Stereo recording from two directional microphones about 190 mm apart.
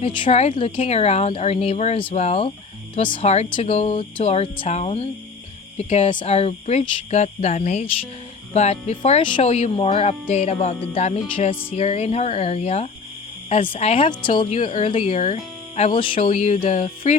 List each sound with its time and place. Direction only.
0.0 s speech: 25° left (ahead or behind)
16.2 s speech: 40° left (ahead or behind)